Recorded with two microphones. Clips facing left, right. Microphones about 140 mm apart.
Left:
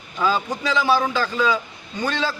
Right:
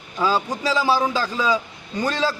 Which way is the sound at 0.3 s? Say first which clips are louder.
Even; 35° right (ahead or behind).